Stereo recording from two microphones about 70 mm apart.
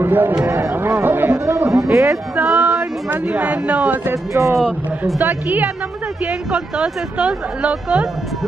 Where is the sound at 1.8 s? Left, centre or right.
Right.